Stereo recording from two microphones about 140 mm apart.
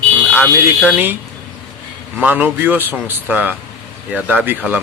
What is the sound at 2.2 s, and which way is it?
Speech, 10° right (ahead or behind).